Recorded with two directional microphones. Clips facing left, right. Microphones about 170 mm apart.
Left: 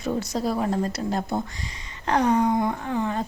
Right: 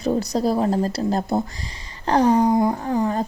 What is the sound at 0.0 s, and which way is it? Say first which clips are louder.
Speech: right 5 dB; 35° right (ahead or behind).